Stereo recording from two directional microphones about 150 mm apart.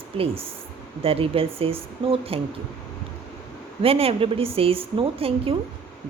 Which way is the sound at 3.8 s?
40° right (ahead or behind).